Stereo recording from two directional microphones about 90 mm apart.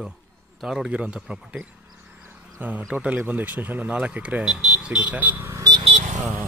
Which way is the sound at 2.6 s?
20° right (ahead or behind).